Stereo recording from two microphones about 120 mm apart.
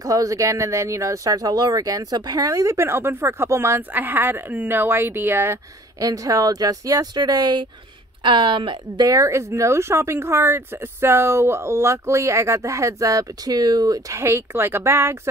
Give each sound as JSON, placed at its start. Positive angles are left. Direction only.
{"t": 0.0, "sound": "a woman's voice", "side_deg": -30}
{"t": 9.0, "sound": "speech", "side_deg": -25}